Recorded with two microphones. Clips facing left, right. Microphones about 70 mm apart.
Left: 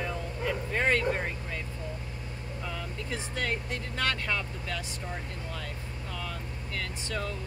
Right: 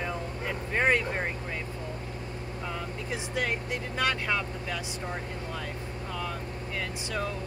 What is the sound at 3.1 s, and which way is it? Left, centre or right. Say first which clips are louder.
Speech: right 2 dB; centre.